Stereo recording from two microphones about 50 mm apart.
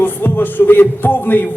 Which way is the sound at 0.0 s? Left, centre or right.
Left.